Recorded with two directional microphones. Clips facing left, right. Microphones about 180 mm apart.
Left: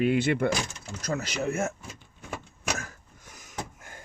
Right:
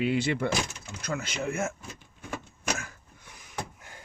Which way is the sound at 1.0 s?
40° left (ahead or behind).